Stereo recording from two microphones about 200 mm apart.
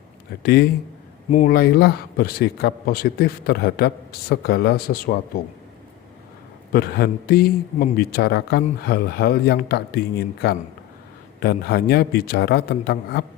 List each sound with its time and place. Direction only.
0.4 s a man's voice: 55° left (ahead or behind)
6.7 s a man's voice: 50° left (ahead or behind)